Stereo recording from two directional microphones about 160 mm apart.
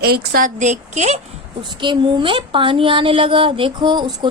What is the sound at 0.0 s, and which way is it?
Speech, 85° right.